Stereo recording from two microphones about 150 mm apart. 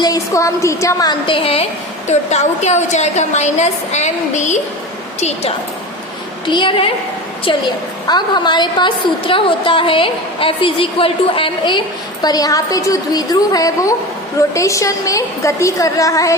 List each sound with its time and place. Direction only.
0.0 s a woman's voice: 20° left (ahead or behind)
2.0 s a woman's voice: 50° left (ahead or behind)
6.4 s a woman's voice: 35° left (ahead or behind)
8.0 s a woman's voice: 30° left (ahead or behind)